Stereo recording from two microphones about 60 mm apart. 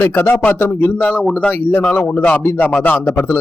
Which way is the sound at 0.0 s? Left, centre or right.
Left.